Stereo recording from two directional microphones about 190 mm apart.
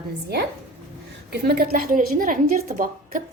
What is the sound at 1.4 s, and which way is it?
A woman's voice, 55° right (ahead or behind).